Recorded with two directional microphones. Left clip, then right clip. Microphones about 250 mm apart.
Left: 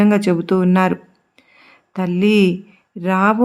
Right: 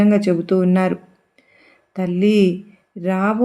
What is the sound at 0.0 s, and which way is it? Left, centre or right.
Speech, left.